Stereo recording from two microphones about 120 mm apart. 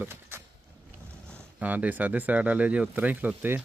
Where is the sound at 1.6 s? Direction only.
15° right (ahead or behind).